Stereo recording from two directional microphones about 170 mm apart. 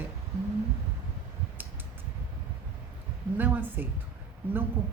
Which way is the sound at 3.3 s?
10° right (ahead or behind).